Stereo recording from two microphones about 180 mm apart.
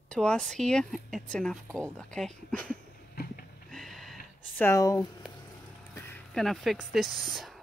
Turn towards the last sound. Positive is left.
turn(degrees=0)  # may be behind; listen again after turning